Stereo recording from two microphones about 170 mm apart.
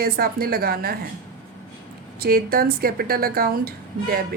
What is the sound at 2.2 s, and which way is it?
Speech, 60° right (ahead or behind).